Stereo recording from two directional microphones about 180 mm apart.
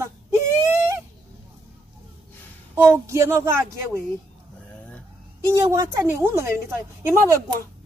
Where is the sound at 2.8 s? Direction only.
15° right (ahead or behind).